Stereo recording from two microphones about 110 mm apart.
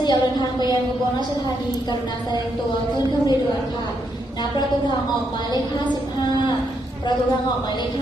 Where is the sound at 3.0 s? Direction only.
40° left (ahead or behind).